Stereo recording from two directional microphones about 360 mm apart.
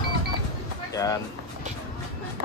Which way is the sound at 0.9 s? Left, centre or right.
Centre.